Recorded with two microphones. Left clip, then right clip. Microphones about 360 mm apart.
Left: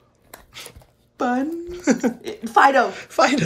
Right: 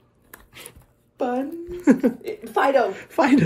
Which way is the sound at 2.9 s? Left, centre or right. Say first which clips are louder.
Left 1 dB; centre.